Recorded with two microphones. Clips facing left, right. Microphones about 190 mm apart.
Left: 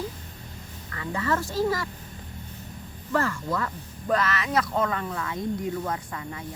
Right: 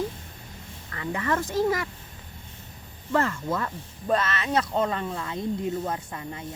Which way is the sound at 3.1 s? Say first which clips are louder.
Right 1 dB; 20° right (ahead or behind).